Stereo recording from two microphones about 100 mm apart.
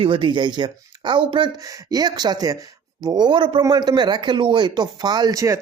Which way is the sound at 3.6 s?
40° right (ahead or behind).